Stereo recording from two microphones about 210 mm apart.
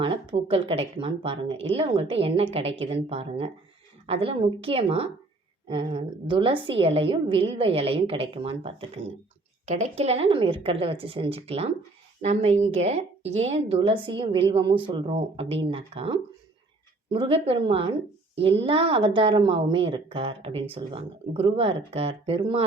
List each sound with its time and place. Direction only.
0.0 s a woman's voice: 25° right (ahead or behind)